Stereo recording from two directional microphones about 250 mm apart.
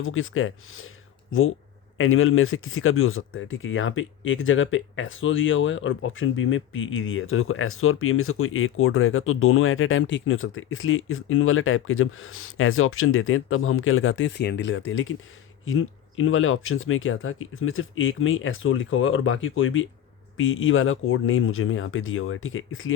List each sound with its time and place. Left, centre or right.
0.0 s speech: left